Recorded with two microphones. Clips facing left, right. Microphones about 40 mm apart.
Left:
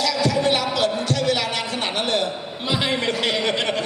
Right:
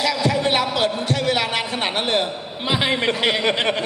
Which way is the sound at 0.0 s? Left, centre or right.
Right.